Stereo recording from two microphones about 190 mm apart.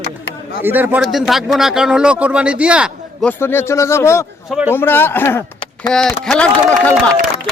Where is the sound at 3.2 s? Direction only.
10° left (ahead or behind).